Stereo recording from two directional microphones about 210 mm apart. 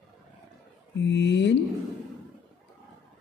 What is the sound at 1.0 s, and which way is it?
Speech, 55° left (ahead or behind).